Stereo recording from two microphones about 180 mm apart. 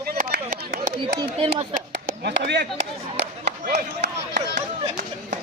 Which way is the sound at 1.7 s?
50° right (ahead or behind).